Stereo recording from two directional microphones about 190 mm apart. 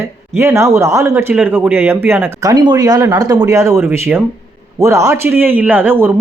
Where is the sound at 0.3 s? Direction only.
15° right (ahead or behind).